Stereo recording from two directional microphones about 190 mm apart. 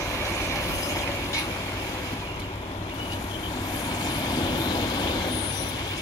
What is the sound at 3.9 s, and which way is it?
Vehicle, 20° left (ahead or behind).